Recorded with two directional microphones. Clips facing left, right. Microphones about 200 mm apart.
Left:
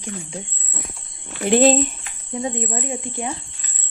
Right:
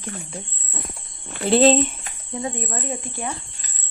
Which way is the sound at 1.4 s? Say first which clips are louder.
Even; 15° left (ahead or behind).